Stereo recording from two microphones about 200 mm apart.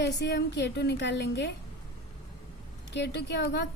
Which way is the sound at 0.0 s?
60° left (ahead or behind).